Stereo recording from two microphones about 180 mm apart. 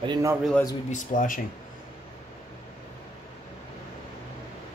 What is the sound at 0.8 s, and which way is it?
Speech, 45° left (ahead or behind).